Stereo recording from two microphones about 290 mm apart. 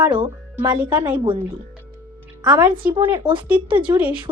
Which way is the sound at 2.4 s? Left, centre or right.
Centre.